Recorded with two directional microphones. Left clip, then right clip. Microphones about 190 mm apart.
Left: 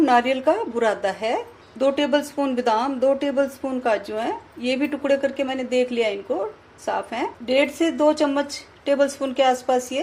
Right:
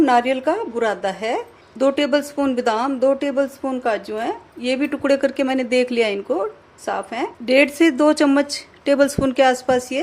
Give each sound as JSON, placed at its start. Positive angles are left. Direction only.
{"t": 0.0, "sound": "a woman's voice", "side_deg": -15}
{"t": 6.8, "sound": "a woman's voice", "side_deg": -15}
{"t": 7.4, "sound": "a woman's voice", "side_deg": -30}